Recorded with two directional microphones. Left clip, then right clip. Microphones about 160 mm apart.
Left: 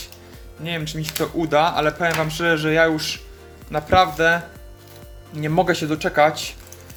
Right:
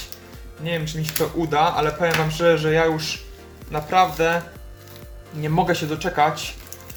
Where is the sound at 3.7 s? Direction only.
40° left (ahead or behind).